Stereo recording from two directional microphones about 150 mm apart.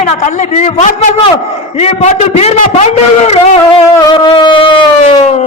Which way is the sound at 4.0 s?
30° left (ahead or behind).